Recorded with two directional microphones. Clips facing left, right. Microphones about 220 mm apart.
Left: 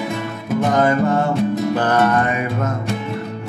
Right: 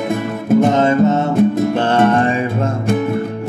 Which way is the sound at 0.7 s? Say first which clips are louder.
Right 3 dB; 25° right (ahead or behind).